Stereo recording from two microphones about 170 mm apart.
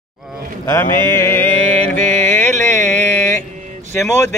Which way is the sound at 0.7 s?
15° left (ahead or behind).